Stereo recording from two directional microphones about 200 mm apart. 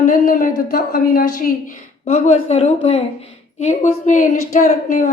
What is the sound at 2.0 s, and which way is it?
A woman's voice, 35° left (ahead or behind).